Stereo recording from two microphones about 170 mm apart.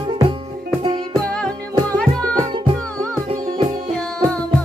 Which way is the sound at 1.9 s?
5° left (ahead or behind).